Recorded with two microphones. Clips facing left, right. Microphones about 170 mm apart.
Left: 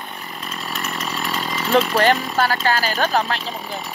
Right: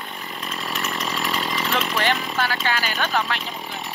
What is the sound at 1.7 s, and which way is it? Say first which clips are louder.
Speech: left 9 dB; 40° left (ahead or behind).